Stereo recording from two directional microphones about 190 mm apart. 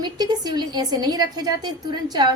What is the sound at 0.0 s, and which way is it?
A woman's voice, 20° right (ahead or behind).